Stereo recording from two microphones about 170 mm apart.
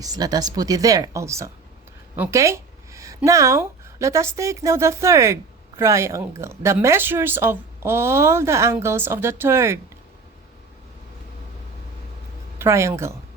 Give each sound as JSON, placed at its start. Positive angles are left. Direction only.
{"t": 0.0, "sound": "speech", "side_deg": -20}
{"t": 12.5, "sound": "speech", "side_deg": -15}